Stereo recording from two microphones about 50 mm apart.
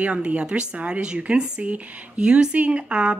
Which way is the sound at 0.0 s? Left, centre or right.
Right.